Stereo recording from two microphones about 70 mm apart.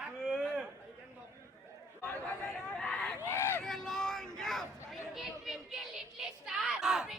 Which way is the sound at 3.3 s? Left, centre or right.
Left.